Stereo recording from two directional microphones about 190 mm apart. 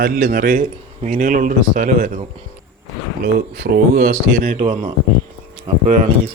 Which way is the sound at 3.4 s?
50° right (ahead or behind).